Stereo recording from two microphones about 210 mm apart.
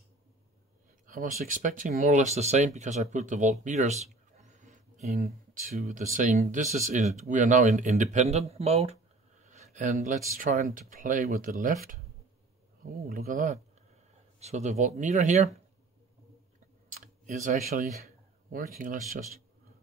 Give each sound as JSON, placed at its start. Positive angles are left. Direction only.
{"t": 1.0, "sound": "speech", "side_deg": -40}
{"t": 3.6, "sound": "a sound", "side_deg": -35}
{"t": 5.2, "sound": "speech", "side_deg": -35}
{"t": 13.0, "sound": "speech", "side_deg": -45}
{"t": 16.9, "sound": "speech", "side_deg": -35}